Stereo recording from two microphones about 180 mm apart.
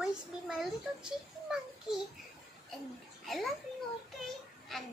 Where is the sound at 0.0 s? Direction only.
5° right (ahead or behind).